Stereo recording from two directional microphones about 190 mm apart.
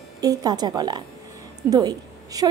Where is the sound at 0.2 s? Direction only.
20° right (ahead or behind).